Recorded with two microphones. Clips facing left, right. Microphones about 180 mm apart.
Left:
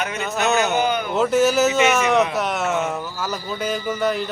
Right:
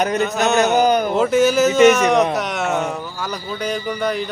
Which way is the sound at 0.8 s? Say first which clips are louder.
Right 6 dB; 40° right (ahead or behind).